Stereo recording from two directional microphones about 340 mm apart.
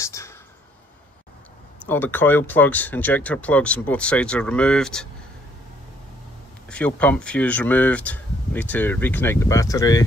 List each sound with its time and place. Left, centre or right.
0.0 s speech: centre
1.9 s speech: centre
6.7 s speech: centre